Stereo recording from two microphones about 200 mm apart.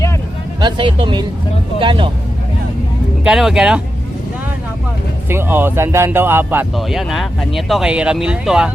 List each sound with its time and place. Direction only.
0.6 s speech: 25° right (ahead or behind)
3.2 s speech: centre (ahead or behind)
5.3 s speech: 10° right (ahead or behind)
6.7 s speech: centre (ahead or behind)